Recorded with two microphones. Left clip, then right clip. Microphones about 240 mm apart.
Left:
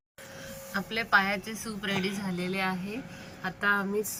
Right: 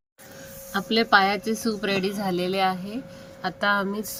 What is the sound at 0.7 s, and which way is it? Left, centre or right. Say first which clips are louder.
Speech: right 6 dB; right.